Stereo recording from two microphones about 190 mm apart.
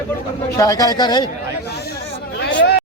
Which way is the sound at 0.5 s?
20° left (ahead or behind).